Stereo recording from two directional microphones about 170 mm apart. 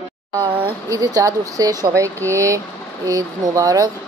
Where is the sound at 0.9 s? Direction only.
20° right (ahead or behind).